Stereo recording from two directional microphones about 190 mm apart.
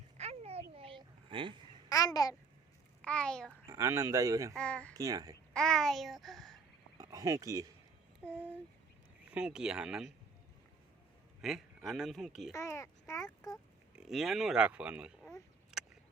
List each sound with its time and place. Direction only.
0.2 s a sound: 35° right (ahead or behind)
1.9 s a child's voice: 20° left (ahead or behind)
3.0 s speech: 5° left (ahead or behind)
3.7 s speech: 15° right (ahead or behind)
4.5 s speech: 5° left (ahead or behind)
4.9 s speech: 20° right (ahead or behind)
5.5 s a sound: 5° left (ahead or behind)
7.0 s speech: 15° right (ahead or behind)
9.3 s speech: 5° right (ahead or behind)
11.4 s speech: centre (ahead or behind)
12.5 s a child's voice: 15° left (ahead or behind)
13.9 s speech: 5° right (ahead or behind)